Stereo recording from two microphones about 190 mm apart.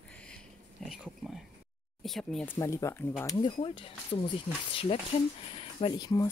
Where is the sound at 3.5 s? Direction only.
30° left (ahead or behind).